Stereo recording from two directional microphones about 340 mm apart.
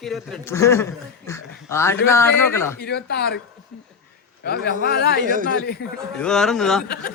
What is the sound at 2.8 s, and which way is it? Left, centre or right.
Speech, left.